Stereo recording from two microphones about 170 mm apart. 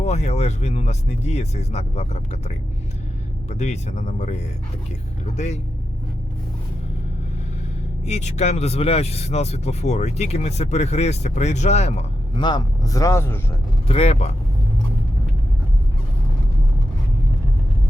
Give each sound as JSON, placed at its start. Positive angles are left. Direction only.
{"t": 0.0, "sound": "speech", "side_deg": 40}
{"t": 8.0, "sound": "speech", "side_deg": 40}
{"t": 12.4, "sound": "speech", "side_deg": 25}
{"t": 13.8, "sound": "speech", "side_deg": 35}